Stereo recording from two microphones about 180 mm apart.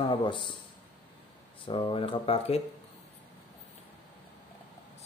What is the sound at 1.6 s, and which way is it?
Speech, 30° left (ahead or behind).